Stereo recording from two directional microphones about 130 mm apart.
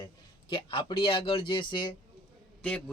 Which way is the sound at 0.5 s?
40° left (ahead or behind).